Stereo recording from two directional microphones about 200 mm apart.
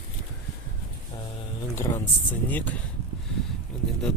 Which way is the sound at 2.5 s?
10° left (ahead or behind).